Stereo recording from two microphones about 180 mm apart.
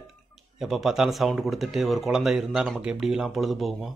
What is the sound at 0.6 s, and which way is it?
Speech, centre (ahead or behind).